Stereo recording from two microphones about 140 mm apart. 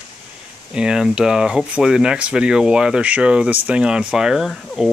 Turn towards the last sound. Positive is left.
turn(degrees=0)  # may be behind; listen again after turning